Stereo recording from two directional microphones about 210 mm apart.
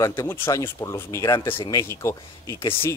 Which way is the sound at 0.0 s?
15° left (ahead or behind).